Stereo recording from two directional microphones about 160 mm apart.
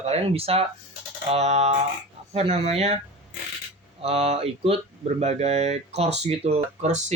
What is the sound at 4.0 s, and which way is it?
Speech, 40° right (ahead or behind).